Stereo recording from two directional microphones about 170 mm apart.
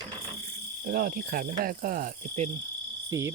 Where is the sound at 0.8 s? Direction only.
60° right (ahead or behind).